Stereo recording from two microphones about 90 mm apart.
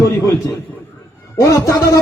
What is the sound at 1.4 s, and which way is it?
Speech, 35° left (ahead or behind).